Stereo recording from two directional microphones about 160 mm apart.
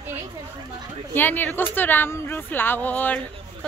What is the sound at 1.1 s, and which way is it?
Speech, 10° left (ahead or behind).